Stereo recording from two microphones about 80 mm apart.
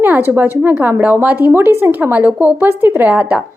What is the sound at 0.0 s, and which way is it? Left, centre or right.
A woman's voice, right.